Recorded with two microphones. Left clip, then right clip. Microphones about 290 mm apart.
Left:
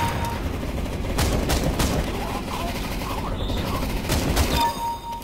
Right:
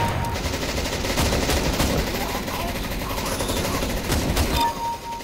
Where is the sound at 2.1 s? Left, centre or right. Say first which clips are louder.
Right 2 dB; centre.